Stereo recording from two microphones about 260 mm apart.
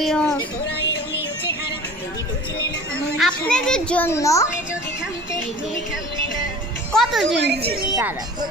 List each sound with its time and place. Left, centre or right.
0.0 s speech: centre
3.2 s a child's voice: centre
6.9 s a child's voice: centre
7.3 s a woman's voice: right
7.9 s speech: centre